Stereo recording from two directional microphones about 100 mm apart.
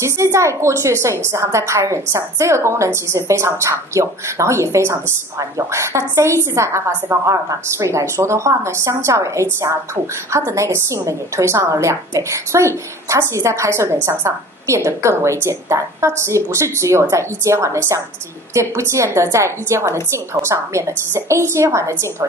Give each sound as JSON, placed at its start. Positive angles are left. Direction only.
{"t": 0.0, "sound": "a woman's voice", "side_deg": -30}